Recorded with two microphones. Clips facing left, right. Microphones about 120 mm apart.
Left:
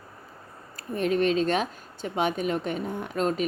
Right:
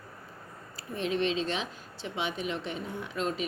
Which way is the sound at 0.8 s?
50° left (ahead or behind).